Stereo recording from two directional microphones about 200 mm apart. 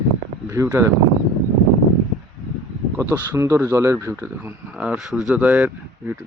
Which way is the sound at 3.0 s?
10° right (ahead or behind).